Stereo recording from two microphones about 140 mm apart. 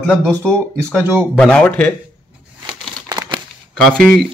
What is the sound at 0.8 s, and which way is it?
Speech, 15° right (ahead or behind).